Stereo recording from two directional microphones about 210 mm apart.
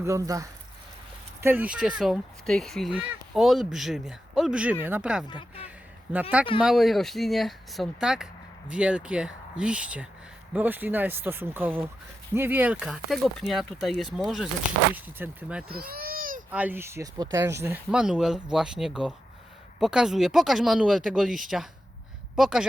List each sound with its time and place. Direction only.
0.0 s speech: 15° right (ahead or behind)
5.3 s speech: 25° left (ahead or behind)
6.6 s speech: centre (ahead or behind)
15.7 s baby cry: 45° right (ahead or behind)
16.5 s speech: 10° right (ahead or behind)